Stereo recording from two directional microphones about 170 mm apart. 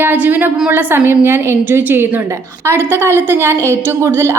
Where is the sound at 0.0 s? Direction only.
10° right (ahead or behind).